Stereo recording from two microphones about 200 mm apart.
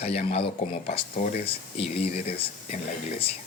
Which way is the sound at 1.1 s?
40° left (ahead or behind).